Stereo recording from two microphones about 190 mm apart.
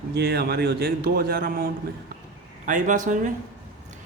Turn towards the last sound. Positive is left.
turn(degrees=-40)  # may be behind; listen again after turning